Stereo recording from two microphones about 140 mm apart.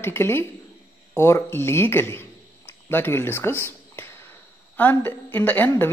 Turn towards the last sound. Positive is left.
turn(degrees=15)  # may be behind; listen again after turning